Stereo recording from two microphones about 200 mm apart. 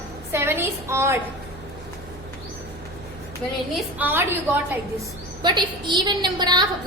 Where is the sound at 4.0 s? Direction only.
10° right (ahead or behind).